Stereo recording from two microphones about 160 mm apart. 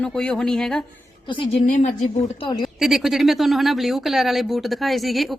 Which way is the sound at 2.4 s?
30° left (ahead or behind).